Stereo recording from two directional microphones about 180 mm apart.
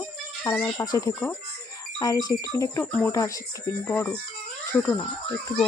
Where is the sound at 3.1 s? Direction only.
20° left (ahead or behind).